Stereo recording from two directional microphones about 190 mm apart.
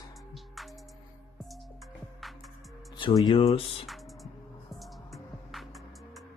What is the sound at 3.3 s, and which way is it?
Speech, 25° left (ahead or behind).